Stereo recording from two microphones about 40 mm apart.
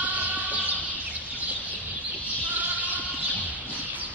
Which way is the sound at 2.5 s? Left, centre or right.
Right.